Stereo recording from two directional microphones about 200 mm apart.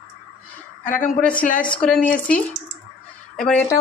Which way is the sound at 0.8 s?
40° left (ahead or behind).